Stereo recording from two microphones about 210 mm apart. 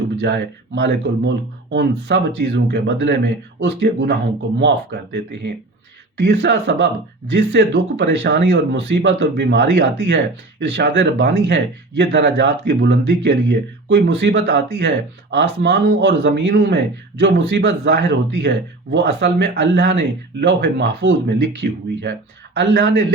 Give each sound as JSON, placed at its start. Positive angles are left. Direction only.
{"t": 0.2, "sound": "speech", "side_deg": -55}
{"t": 6.1, "sound": "speech", "side_deg": -55}